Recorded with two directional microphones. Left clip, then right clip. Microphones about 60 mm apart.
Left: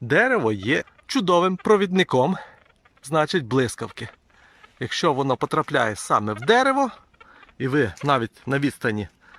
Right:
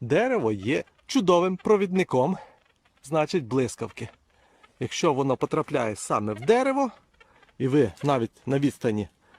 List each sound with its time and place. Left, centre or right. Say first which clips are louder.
0.1 s speech: left 4 dB; right
1.0 s speech: left 1 dB; right
1.3 s speech: left 3 dB; right
7.6 s speech: left 1 dB; right